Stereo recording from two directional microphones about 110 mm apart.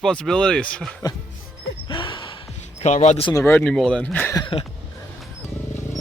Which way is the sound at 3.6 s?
10° left (ahead or behind).